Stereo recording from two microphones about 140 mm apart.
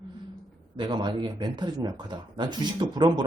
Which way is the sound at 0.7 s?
35° right (ahead or behind).